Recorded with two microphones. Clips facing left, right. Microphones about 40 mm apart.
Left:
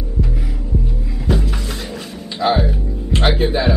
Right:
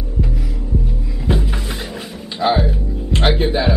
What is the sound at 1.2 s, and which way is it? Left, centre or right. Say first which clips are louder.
Music: even; centre.